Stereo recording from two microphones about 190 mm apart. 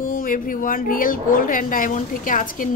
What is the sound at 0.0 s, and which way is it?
A woman's voice, 45° left (ahead or behind).